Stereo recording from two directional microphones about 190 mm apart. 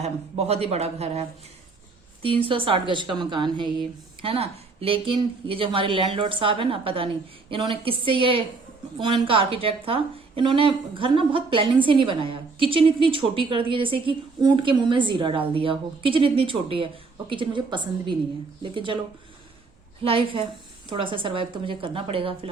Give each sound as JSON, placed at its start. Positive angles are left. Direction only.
{"t": 0.0, "sound": "a man's voice", "side_deg": -35}
{"t": 2.2, "sound": "a woman's voice", "side_deg": -30}
{"t": 20.0, "sound": "a woman's voice", "side_deg": -30}